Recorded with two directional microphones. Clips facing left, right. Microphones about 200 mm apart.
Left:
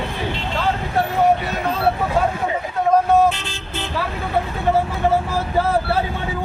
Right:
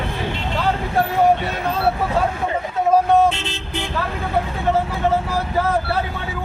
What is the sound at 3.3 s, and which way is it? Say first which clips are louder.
Vehicle: even; 25° right (ahead or behind).